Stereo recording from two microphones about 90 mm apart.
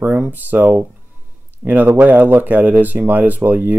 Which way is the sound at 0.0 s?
20° right (ahead or behind).